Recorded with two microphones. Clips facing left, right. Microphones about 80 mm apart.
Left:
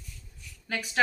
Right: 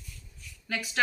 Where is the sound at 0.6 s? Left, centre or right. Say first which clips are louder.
Left 1 dB; left.